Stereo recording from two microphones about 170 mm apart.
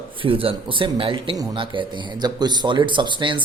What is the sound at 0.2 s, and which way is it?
Speech, 30° right (ahead or behind).